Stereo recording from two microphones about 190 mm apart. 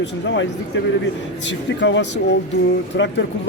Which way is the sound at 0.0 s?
70° left (ahead or behind).